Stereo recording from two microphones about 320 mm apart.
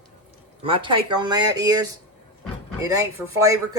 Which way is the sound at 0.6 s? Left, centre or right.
Centre.